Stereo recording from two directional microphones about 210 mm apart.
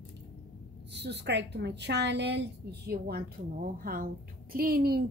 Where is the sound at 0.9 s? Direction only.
55° right (ahead or behind).